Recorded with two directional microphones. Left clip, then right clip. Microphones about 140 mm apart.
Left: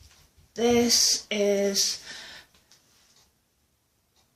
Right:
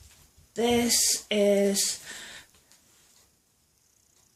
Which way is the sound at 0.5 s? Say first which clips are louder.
Left 3 dB; 65° right (ahead or behind).